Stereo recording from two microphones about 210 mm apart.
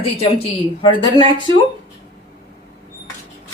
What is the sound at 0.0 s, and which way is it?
Speech, 25° left (ahead or behind).